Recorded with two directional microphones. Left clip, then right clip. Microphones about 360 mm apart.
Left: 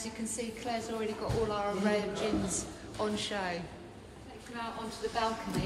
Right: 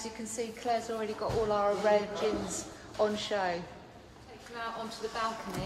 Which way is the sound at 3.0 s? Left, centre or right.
Right.